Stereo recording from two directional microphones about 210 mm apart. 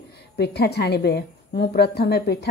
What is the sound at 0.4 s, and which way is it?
A woman's voice, 50° left (ahead or behind).